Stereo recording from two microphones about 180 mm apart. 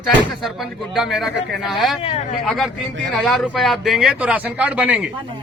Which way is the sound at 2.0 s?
35° left (ahead or behind).